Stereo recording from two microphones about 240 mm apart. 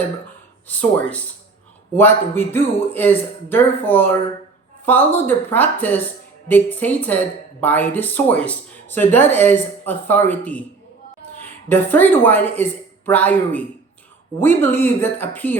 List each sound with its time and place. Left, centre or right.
0.7 s speech: centre
11.7 s speech: centre